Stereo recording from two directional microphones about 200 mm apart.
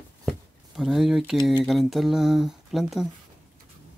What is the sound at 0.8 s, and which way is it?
Speech, centre (ahead or behind).